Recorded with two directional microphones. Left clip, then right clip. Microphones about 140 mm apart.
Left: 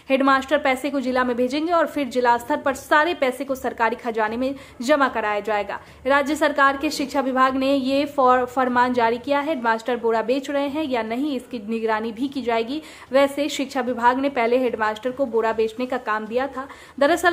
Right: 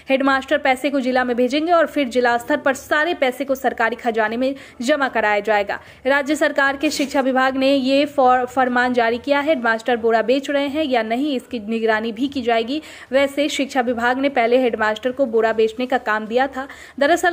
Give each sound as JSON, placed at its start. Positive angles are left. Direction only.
{"t": 0.1, "sound": "a woman's voice", "side_deg": -20}